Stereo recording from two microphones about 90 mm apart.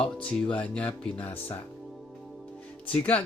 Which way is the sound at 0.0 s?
10° left (ahead or behind).